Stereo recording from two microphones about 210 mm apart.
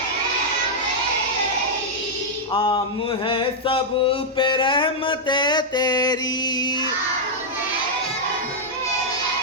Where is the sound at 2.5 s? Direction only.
20° left (ahead or behind).